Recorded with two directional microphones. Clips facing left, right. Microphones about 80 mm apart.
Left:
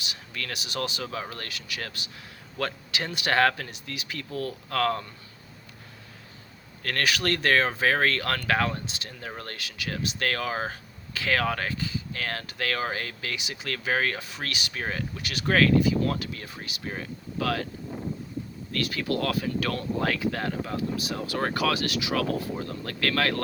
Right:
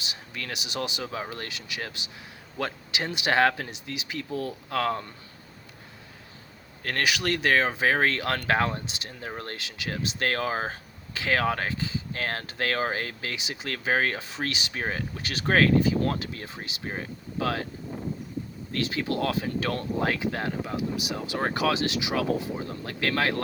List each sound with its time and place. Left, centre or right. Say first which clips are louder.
0.0 s speech: left 1 dB; right
6.8 s speech: even; centre
18.7 s speech: even; right